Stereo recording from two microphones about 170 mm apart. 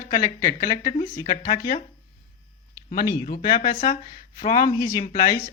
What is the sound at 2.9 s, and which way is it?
Speech, 55° left (ahead or behind).